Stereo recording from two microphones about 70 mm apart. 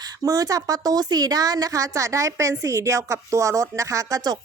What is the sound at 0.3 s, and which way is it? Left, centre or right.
A woman's voice, right.